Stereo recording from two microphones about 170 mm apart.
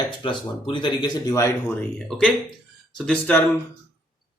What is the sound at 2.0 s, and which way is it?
A man's voice, 5° left (ahead or behind).